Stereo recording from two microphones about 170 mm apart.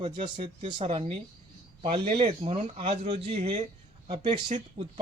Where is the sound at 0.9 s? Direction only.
30° right (ahead or behind).